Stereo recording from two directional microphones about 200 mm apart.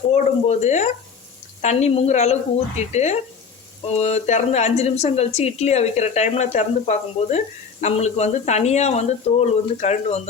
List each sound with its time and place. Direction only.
0.1 s a woman's voice: 35° left (ahead or behind)